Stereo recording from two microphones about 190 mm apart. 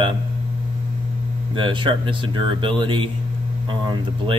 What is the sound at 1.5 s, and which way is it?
A man's voice, 25° right (ahead or behind).